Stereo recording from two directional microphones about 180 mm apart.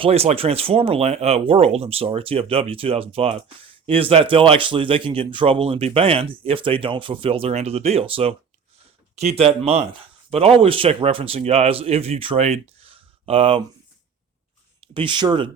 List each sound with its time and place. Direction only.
0.0 s speech: 35° right (ahead or behind)
14.9 s speech: 25° right (ahead or behind)